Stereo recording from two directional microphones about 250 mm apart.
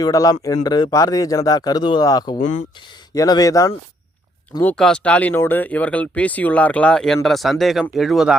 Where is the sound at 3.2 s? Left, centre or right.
Centre.